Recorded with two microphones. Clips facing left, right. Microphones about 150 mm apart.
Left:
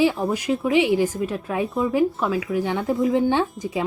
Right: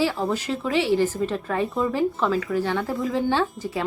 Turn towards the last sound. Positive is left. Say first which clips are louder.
# left 1 dB
turn(degrees=20)  # may be behind; listen again after turning